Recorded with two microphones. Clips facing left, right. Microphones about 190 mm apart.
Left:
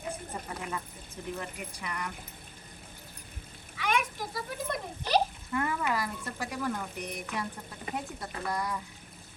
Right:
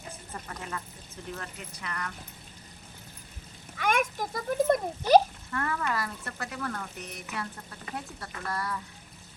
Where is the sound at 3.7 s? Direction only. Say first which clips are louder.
Right 3 dB; 50° right (ahead or behind).